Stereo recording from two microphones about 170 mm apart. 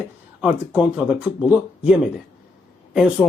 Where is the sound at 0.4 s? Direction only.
5° right (ahead or behind).